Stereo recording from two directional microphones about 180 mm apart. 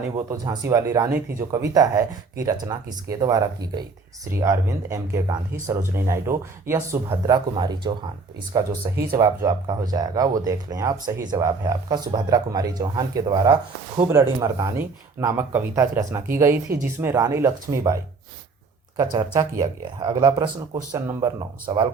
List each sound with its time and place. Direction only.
0.2 s speech: 20° right (ahead or behind)
19.1 s speech: 20° right (ahead or behind)